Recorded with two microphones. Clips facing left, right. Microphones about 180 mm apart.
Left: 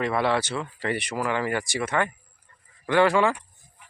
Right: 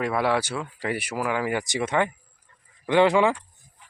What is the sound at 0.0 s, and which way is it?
Speech, 10° right (ahead or behind).